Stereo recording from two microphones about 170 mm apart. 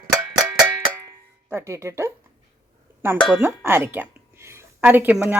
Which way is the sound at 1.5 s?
15° right (ahead or behind).